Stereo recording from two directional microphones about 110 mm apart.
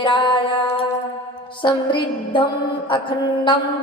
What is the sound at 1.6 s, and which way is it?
Mantra, 50° left (ahead or behind).